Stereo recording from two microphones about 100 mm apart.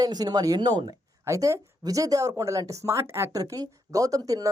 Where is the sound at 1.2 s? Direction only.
30° right (ahead or behind).